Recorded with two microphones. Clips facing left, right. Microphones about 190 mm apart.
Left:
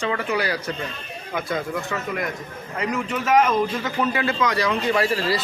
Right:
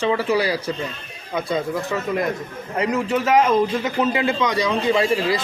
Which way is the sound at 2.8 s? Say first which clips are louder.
Right 5 dB; 25° right (ahead or behind).